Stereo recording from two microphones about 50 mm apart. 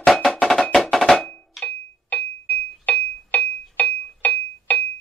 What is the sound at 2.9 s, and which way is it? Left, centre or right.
Music, left.